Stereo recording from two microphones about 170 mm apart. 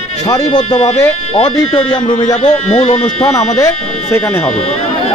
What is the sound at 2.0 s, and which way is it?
Speech, 45° left (ahead or behind).